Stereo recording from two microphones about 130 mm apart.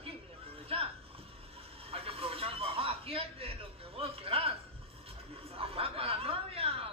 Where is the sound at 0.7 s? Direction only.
50° right (ahead or behind).